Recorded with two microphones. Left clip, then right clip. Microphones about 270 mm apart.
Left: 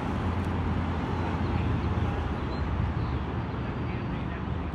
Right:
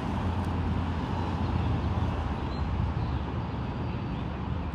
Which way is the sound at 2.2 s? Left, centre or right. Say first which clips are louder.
Left 1 dB; centre.